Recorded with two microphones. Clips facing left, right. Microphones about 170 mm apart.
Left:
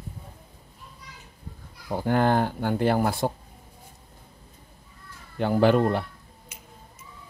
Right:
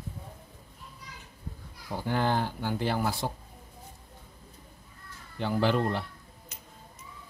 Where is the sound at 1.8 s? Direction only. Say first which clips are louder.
Left 6 dB; 50° left (ahead or behind).